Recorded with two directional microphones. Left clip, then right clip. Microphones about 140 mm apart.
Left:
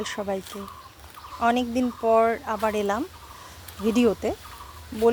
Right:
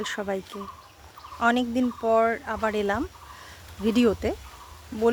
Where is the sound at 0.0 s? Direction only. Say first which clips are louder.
Left 1 dB; 20° right (ahead or behind).